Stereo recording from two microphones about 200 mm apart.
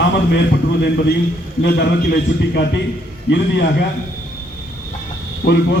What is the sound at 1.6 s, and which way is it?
A man's voice, 55° left (ahead or behind).